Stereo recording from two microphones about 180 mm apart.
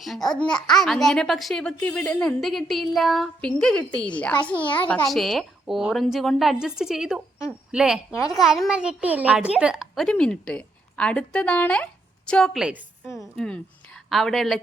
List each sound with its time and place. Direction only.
0.0 s a child's voice: centre (ahead or behind)
8.1 s a woman's voice: 15° left (ahead or behind)
8.4 s a child's voice: centre (ahead or behind)